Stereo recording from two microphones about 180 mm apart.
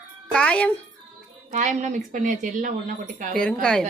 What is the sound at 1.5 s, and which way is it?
A woman's voice, 40° right (ahead or behind).